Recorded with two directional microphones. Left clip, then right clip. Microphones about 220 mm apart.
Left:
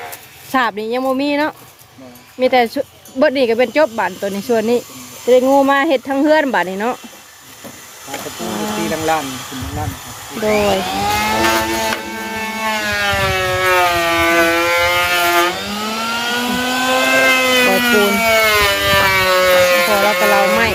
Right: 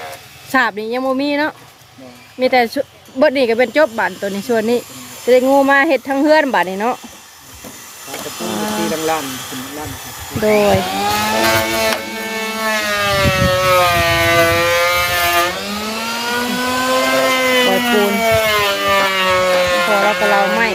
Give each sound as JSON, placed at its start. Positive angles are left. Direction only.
{"t": 0.5, "sound": "speech", "side_deg": 0}
{"t": 10.4, "sound": "a sound", "side_deg": -20}
{"t": 16.2, "sound": "vehicle", "side_deg": -20}